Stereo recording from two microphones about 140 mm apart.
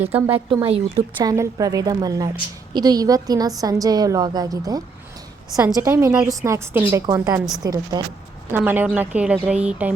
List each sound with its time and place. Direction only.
0.1 s speech: 45° right (ahead or behind)
1.2 s a woman's voice: 25° right (ahead or behind)
8.5 s a woman's voice: 10° right (ahead or behind)